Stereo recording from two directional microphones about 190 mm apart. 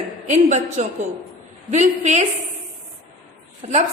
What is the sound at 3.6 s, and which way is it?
Speech, 35° right (ahead or behind).